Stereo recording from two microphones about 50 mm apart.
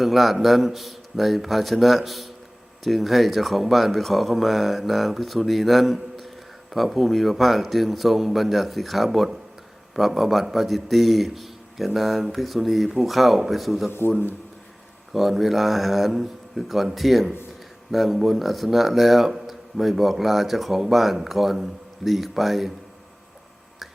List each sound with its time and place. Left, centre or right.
0.0 s speech: centre
15.1 s speech: centre